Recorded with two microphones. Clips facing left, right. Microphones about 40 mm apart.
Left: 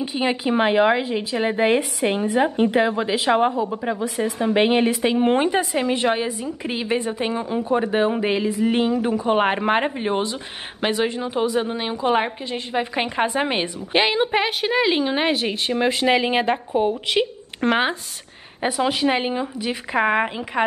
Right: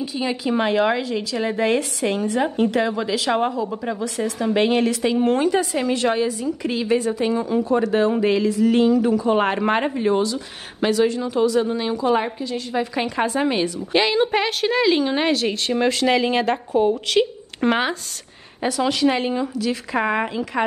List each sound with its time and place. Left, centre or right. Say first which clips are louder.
0.0 s speech: left 2 dB; left
9.9 s speech: right 3 dB; left
17.6 s speech: right 1 dB; centre
18.6 s speech: right 1 dB; left